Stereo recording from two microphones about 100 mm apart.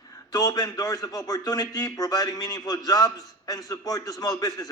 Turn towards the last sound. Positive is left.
turn(degrees=35)  # may be behind; listen again after turning